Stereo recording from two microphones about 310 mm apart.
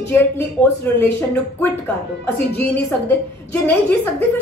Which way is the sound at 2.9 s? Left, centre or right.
Centre.